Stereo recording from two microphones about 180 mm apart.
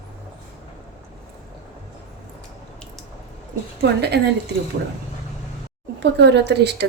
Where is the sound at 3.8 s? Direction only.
65° right (ahead or behind).